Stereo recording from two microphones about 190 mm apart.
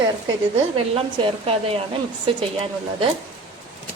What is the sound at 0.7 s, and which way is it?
A woman's voice, 30° right (ahead or behind).